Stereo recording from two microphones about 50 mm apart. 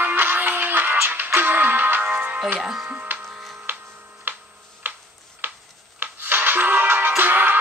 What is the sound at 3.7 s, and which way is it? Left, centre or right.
Music, right.